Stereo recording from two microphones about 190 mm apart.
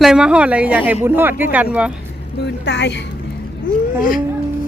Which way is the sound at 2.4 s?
65° left (ahead or behind).